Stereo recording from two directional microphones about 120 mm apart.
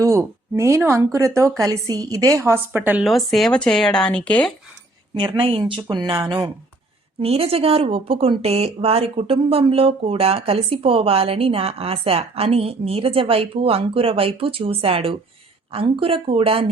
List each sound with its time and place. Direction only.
0.0 s a woman's voice: 25° right (ahead or behind)
3.0 s speech: centre (ahead or behind)
5.1 s speech: 45° right (ahead or behind)
7.2 s speech: 55° right (ahead or behind)